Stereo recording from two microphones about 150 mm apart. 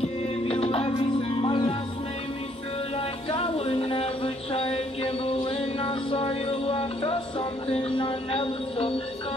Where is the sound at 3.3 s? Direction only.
40° left (ahead or behind).